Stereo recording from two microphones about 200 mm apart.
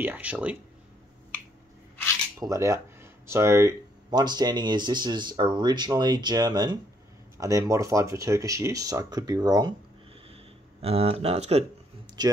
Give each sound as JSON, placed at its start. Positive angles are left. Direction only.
{"t": 0.0, "sound": "speech", "side_deg": -10}
{"t": 2.4, "sound": "speech", "side_deg": -15}
{"t": 12.2, "sound": "speech", "side_deg": -20}